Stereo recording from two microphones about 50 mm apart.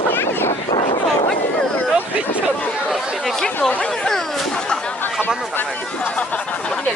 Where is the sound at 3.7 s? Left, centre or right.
Left.